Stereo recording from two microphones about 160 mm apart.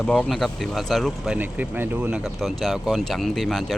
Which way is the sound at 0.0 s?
Centre (ahead or behind).